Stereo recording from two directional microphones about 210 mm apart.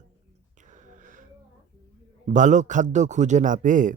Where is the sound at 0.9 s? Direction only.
40° right (ahead or behind).